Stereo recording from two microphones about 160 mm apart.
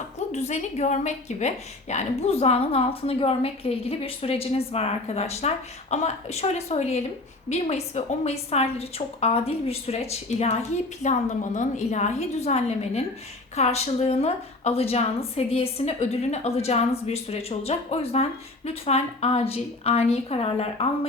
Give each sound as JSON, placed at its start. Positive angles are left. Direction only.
{"t": 0.3, "sound": "a woman's voice", "side_deg": 45}